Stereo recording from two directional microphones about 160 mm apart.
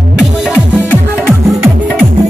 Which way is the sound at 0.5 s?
10° right (ahead or behind).